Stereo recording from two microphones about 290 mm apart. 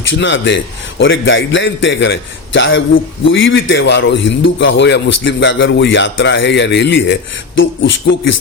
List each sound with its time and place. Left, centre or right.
0.1 s a man's voice: left